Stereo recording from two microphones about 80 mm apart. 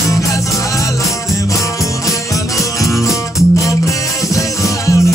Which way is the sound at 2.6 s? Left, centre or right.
Left.